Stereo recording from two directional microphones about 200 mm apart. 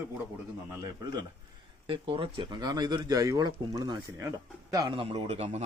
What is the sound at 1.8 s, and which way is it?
Speech, 25° right (ahead or behind).